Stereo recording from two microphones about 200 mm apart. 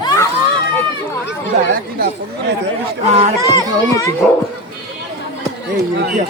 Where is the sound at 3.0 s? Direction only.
30° right (ahead or behind).